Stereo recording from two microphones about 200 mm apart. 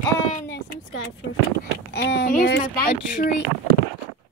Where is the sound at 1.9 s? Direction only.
60° left (ahead or behind).